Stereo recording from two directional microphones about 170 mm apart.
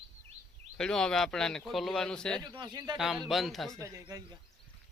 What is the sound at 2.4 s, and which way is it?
Speech, 25° right (ahead or behind).